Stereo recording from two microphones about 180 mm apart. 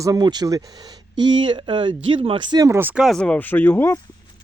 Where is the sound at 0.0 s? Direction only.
20° right (ahead or behind); by 4.0 s 15° left (ahead or behind).